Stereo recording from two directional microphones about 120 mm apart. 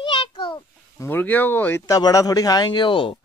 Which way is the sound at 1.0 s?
15° left (ahead or behind).